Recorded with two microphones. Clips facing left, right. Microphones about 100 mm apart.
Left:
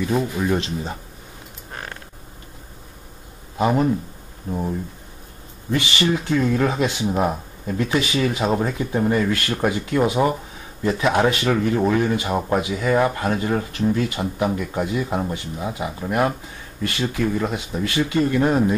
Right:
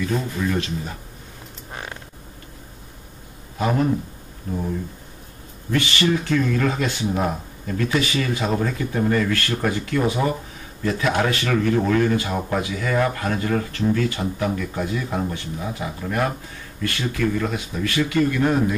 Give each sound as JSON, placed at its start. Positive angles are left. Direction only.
{"t": 0.0, "sound": "speech", "side_deg": 20}
{"t": 3.5, "sound": "a man's voice", "side_deg": 20}
{"t": 5.7, "sound": "speech", "side_deg": 20}